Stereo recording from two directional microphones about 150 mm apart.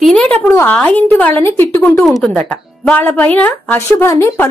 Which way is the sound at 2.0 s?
Centre (ahead or behind).